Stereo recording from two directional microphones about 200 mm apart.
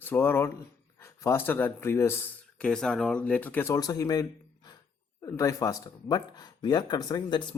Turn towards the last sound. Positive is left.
turn(degrees=20)  # may be behind; listen again after turning